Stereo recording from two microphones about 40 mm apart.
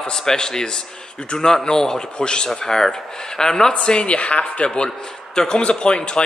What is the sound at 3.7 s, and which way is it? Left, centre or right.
A man's voice, left.